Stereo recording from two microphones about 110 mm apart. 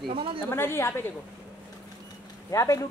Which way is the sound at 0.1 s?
55° right (ahead or behind).